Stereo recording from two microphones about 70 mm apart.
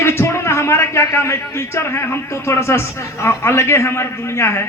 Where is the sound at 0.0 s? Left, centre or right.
Left.